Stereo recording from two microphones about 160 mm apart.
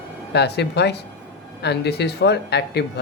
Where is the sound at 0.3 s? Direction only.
90° left.